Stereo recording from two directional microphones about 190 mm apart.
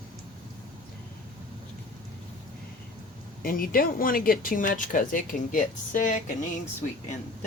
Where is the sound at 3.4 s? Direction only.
50° left (ahead or behind).